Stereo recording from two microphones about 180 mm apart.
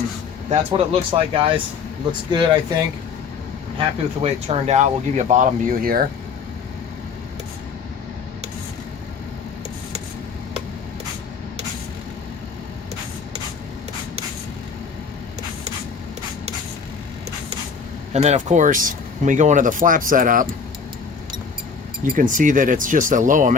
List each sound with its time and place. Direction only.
0.5 s speech: 30° right (ahead or behind)
3.8 s speech: 35° right (ahead or behind); by 6.1 s 55° right (ahead or behind)
18.1 s speech: 40° right (ahead or behind)
22.0 s speech: 50° right (ahead or behind)